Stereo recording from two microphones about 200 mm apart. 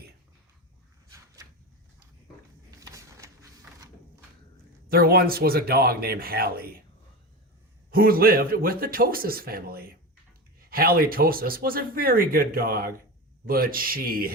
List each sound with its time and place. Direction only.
2.6 s a sound: 15° right (ahead or behind)
4.9 s speech: 50° right (ahead or behind)
7.9 s speech: 45° right (ahead or behind)